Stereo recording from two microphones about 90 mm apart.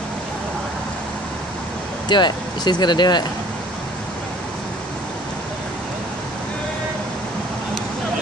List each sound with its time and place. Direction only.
2.0 s speech: 55° left (ahead or behind)